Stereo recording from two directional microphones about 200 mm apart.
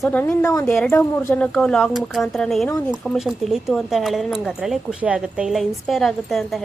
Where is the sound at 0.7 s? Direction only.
Centre (ahead or behind).